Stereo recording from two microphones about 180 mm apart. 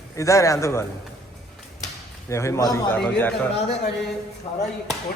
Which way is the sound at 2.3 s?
15° left (ahead or behind).